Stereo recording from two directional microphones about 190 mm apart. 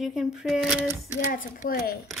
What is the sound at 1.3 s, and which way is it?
Speech, 45° left (ahead or behind).